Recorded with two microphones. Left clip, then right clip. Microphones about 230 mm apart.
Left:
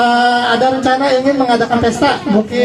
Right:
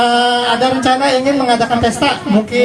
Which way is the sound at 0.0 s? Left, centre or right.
Right.